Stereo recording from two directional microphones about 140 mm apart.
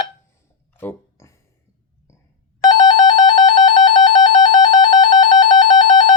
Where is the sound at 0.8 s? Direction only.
20° left (ahead or behind).